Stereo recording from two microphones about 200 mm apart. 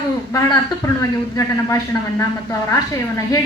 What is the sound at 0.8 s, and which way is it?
Speech, 15° left (ahead or behind).